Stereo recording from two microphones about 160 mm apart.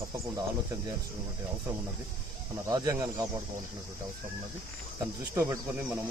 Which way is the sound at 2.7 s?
20° right (ahead or behind).